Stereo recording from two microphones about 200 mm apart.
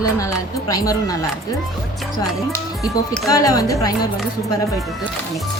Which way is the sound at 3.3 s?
15° left (ahead or behind).